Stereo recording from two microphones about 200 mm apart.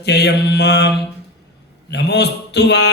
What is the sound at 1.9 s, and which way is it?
A man's voice, 55° left (ahead or behind).